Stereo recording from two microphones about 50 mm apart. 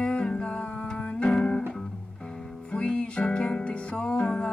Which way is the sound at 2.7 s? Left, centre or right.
Left.